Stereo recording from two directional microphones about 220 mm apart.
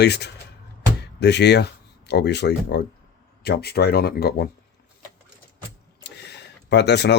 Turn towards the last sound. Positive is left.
turn(degrees=50)  # may be behind; listen again after turning